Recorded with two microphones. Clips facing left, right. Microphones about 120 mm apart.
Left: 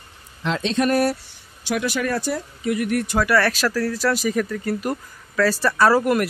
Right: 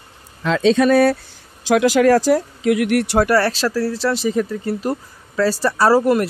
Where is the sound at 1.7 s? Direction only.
90° right; by 3.3 s 75° right (ahead or behind).